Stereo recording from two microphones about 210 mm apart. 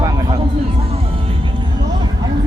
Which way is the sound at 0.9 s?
30° right (ahead or behind).